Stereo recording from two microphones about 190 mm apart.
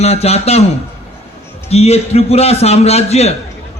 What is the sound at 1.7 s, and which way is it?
A man's voice, 35° left (ahead or behind).